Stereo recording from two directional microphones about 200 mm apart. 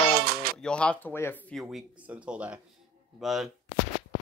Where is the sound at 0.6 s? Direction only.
5° left (ahead or behind).